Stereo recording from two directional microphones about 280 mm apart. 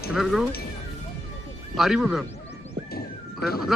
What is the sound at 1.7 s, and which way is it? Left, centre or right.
Speech, centre.